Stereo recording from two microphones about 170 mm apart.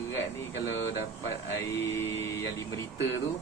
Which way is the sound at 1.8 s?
15° left (ahead or behind).